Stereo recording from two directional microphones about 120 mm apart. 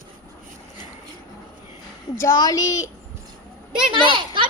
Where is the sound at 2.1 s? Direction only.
25° left (ahead or behind).